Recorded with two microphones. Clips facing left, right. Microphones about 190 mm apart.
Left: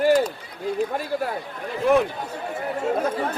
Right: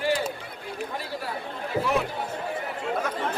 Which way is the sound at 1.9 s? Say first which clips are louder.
Left 9 dB; 55° left (ahead or behind).